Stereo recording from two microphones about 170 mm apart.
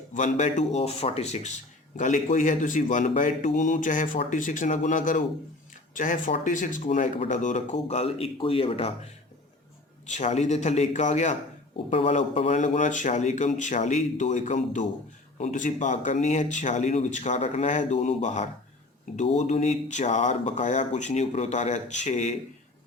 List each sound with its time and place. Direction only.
0.1 s speech: 45° left (ahead or behind)
10.1 s speech: 45° left (ahead or behind)
11.9 s speech: 35° left (ahead or behind)